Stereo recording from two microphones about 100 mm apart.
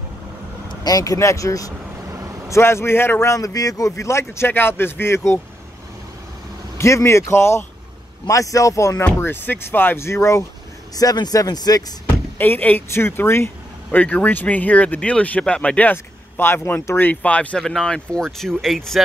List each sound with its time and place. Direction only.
0.8 s speech: 35° left (ahead or behind)
2.1 s vehicle: 30° right (ahead or behind)
2.5 s a man's voice: 25° left (ahead or behind)
6.8 s a man's voice: 30° left (ahead or behind)
8.9 s a man's voice: 20° left (ahead or behind)
11.0 s speech: 40° left (ahead or behind)
12.4 s a man's voice: 20° left (ahead or behind); by 19.0 s centre (ahead or behind)